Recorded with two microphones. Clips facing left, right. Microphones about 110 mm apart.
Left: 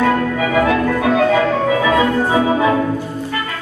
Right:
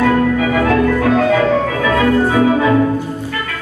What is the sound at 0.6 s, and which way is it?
Music, 5° left (ahead or behind).